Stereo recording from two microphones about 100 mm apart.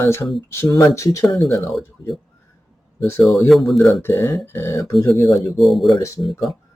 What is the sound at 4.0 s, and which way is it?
Speech, 20° left (ahead or behind).